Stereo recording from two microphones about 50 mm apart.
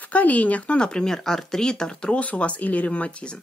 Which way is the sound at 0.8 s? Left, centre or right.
Centre.